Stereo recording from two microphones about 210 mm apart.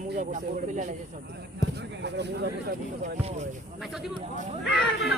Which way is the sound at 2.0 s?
55° right (ahead or behind).